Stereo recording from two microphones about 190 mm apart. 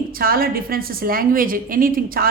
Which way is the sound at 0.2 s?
50° right (ahead or behind).